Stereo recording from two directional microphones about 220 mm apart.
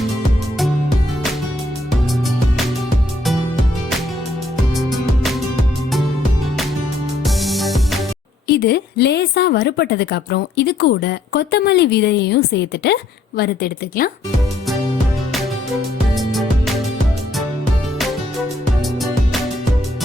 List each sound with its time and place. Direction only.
4.7 s music: centre (ahead or behind)
7.3 s music: centre (ahead or behind)
8.4 s a woman's voice: 45° left (ahead or behind)
16.1 s music: centre (ahead or behind)